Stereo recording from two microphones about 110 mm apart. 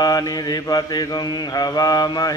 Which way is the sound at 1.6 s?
35° left (ahead or behind).